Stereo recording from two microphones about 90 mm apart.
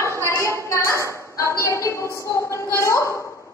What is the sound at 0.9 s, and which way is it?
Speech, 35° right (ahead or behind).